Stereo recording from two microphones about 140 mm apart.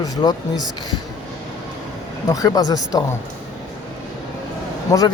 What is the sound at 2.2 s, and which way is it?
Speech, 25° left (ahead or behind).